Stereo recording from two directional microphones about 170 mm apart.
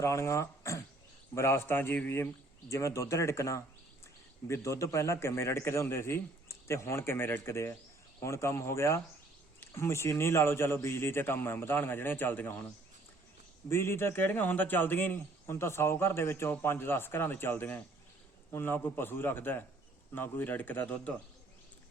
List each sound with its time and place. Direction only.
0.0 s a man's voice: 15° left (ahead or behind)
13.7 s a man's voice: 15° left (ahead or behind)